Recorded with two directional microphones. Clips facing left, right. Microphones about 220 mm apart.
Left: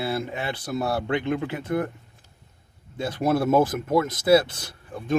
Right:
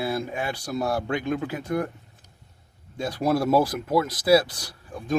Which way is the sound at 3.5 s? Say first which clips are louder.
Left 2 dB; 35° right (ahead or behind).